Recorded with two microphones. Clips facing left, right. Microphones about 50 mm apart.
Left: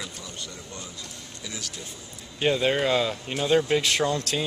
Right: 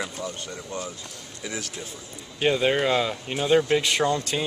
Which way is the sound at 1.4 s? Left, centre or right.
Right.